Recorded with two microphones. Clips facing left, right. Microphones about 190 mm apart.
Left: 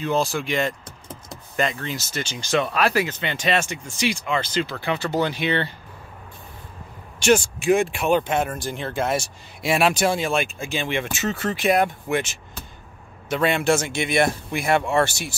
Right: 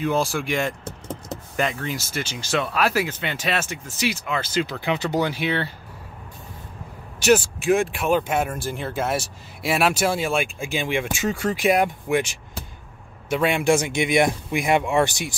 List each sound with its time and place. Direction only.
0.0 s speech: 10° right (ahead or behind)
7.2 s speech: 5° right (ahead or behind)